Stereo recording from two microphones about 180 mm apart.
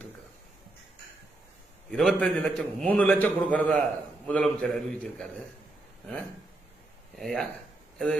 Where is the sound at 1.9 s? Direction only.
5° left (ahead or behind).